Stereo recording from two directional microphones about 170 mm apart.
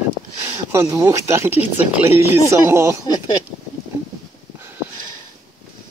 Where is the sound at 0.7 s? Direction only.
15° right (ahead or behind).